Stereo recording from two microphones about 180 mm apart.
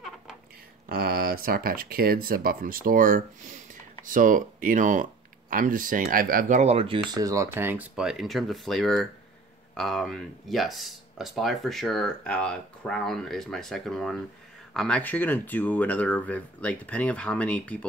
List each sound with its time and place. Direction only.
0.8 s speech: 55° right (ahead or behind)
6.6 s speech: 35° right (ahead or behind)
7.1 s speech: 20° right (ahead or behind); by 17.7 s 5° left (ahead or behind)